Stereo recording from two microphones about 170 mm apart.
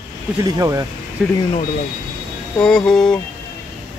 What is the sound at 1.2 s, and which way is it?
Speech, centre (ahead or behind).